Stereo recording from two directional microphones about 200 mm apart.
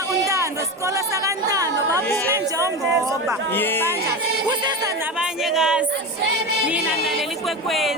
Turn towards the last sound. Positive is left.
turn(degrees=0)  # may be behind; listen again after turning